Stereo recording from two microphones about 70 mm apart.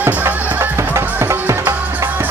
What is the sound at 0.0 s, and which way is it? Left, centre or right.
Music, right.